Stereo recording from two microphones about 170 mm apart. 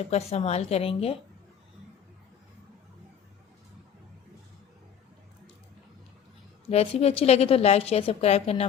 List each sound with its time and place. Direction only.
0.0 s a woman's voice: 35° left (ahead or behind)
6.7 s a woman's voice: 35° left (ahead or behind)